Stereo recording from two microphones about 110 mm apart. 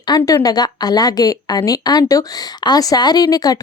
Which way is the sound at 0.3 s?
35° left (ahead or behind).